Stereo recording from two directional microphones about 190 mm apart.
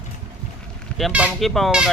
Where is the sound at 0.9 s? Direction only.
5° right (ahead or behind).